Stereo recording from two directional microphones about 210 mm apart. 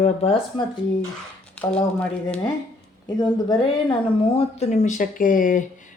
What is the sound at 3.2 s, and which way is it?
Speech, 20° left (ahead or behind).